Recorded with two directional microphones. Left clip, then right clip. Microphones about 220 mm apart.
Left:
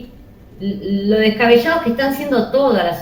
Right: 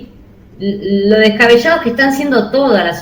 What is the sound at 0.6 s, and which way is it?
A woman's voice, 45° right (ahead or behind).